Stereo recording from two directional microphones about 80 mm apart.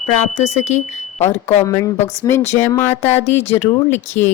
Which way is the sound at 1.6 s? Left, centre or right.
Left.